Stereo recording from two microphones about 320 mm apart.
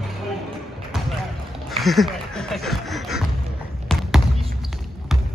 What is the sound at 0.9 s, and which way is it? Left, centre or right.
Basketball bounce, centre.